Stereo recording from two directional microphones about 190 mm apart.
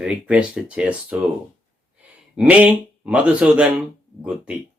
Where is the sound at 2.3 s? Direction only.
5° right (ahead or behind).